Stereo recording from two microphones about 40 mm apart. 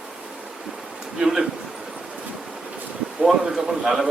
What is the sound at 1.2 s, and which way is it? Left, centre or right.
Speech, centre.